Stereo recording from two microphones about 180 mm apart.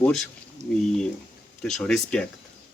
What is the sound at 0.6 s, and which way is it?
Speech, 40° right (ahead or behind).